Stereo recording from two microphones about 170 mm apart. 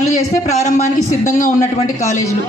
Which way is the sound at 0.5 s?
45° left (ahead or behind).